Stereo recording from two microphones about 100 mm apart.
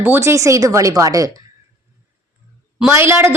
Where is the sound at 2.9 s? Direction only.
25° right (ahead or behind).